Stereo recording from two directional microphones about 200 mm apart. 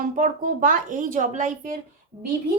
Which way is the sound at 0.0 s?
40° right (ahead or behind).